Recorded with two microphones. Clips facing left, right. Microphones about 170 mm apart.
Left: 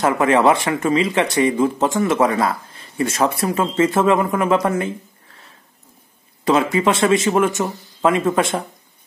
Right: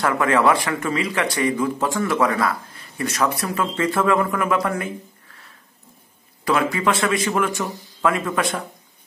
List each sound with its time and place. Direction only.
0.0 s speech: 20° left (ahead or behind)
6.4 s speech: 20° left (ahead or behind)